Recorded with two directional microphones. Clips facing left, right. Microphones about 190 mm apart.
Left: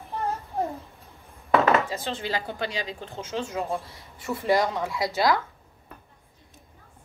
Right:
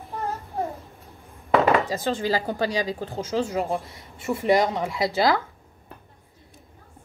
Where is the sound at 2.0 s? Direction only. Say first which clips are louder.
Right 6 dB; 40° right (ahead or behind).